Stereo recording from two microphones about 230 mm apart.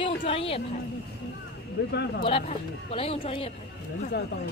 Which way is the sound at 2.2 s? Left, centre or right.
Left.